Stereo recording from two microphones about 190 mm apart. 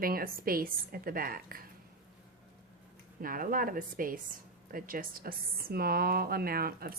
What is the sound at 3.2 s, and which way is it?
Speech, 50° right (ahead or behind).